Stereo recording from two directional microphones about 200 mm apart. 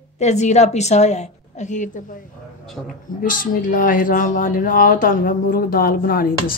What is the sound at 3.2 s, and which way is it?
Speech, 45° left (ahead or behind).